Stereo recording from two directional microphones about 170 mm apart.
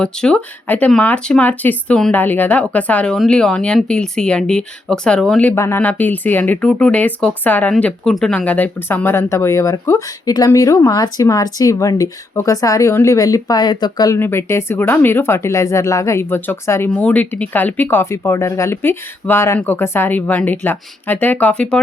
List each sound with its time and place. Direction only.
0.0 s speech: 5° left (ahead or behind)